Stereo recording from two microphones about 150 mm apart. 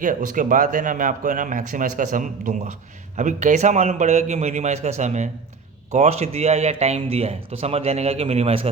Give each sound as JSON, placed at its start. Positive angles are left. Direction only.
{"t": 0.0, "sound": "speech", "side_deg": -60}